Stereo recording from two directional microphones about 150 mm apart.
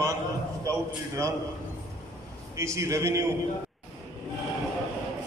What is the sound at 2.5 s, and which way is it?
Speech, 20° right (ahead or behind).